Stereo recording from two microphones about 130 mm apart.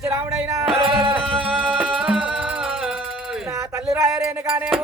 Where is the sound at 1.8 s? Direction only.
10° right (ahead or behind).